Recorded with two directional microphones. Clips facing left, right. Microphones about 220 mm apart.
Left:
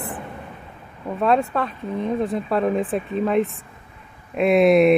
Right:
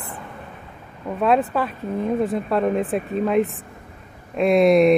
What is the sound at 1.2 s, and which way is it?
Speech, 5° right (ahead or behind).